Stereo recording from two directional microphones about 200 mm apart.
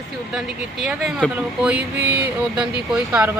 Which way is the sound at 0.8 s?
Centre (ahead or behind).